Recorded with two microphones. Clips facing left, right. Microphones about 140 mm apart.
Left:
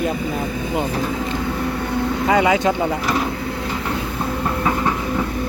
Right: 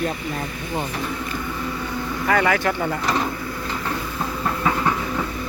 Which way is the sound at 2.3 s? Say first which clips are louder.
Left 3 dB; 20° left (ahead or behind).